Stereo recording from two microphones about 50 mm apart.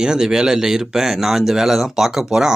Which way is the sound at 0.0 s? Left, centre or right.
Centre.